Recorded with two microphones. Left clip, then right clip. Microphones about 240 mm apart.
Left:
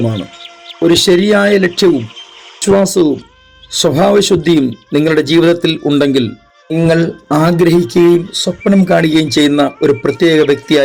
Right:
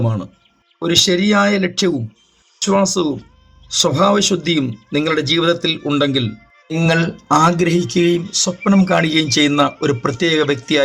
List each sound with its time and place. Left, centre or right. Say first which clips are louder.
0.8 s speech: left 6 dB; left
6.9 s speech: right 1 dB; centre